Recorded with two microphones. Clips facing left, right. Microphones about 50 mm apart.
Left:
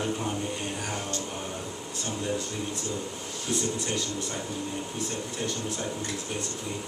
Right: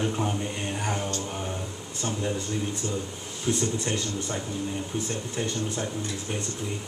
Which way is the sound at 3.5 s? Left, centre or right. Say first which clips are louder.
Right 3 dB; centre.